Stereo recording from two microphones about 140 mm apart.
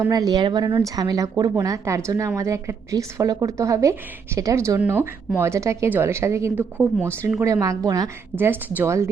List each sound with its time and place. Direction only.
0.1 s speech: 30° right (ahead or behind)